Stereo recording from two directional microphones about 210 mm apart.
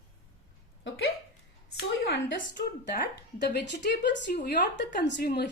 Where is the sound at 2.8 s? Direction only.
50° left (ahead or behind).